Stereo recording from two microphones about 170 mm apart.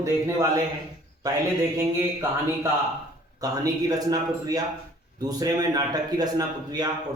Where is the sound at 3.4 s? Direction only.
20° right (ahead or behind).